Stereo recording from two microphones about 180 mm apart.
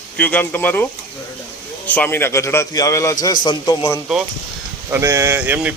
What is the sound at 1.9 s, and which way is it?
A man's voice, 10° left (ahead or behind).